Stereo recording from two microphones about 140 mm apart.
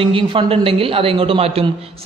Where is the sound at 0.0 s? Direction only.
40° right (ahead or behind).